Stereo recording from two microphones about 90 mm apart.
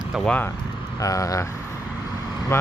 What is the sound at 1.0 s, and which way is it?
Speech, 40° left (ahead or behind).